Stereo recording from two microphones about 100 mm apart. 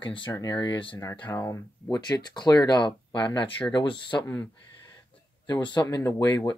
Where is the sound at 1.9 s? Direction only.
45° left (ahead or behind).